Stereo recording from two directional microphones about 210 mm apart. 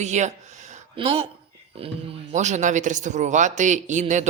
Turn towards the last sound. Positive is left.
turn(degrees=-35)  # may be behind; listen again after turning